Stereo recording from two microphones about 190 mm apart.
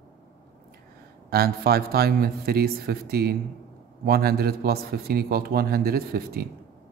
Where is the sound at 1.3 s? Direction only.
55° right (ahead or behind).